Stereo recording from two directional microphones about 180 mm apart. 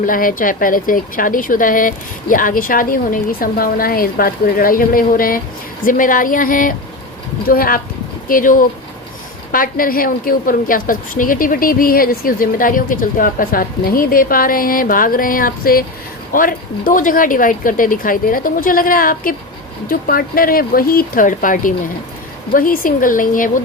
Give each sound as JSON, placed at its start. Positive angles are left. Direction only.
{"t": 0.0, "sound": "a woman's voice", "side_deg": 50}